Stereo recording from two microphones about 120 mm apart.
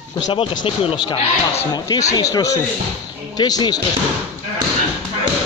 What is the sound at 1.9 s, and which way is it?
Speech, 30° left (ahead or behind).